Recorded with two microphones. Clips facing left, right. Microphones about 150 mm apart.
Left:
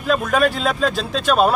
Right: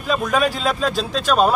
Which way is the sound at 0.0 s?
Centre (ahead or behind).